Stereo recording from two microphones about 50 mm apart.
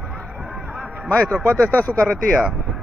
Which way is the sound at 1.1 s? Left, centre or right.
Left.